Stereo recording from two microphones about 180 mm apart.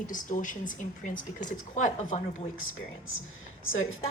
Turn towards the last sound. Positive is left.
turn(degrees=90)